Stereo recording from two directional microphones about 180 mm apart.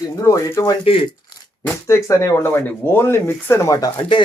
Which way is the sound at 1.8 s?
15° left (ahead or behind).